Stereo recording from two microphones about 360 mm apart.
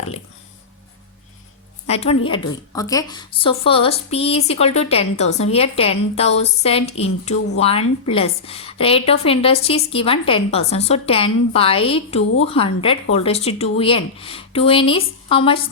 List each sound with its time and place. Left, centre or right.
1.9 s a woman's voice: centre